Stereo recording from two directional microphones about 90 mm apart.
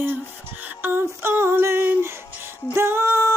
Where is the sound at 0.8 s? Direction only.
25° right (ahead or behind).